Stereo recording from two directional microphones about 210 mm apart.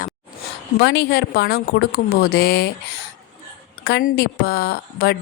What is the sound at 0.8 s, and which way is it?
A woman's voice, 50° left (ahead or behind).